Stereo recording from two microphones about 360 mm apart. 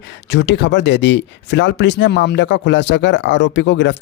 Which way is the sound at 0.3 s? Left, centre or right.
Left.